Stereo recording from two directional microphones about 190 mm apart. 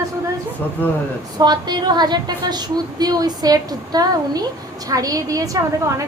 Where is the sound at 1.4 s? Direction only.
20° right (ahead or behind).